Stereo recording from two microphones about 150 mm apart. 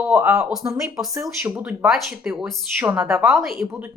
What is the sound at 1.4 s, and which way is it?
Speech, 10° right (ahead or behind).